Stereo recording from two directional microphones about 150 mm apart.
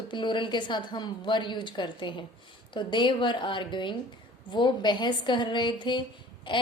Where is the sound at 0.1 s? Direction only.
30° left (ahead or behind).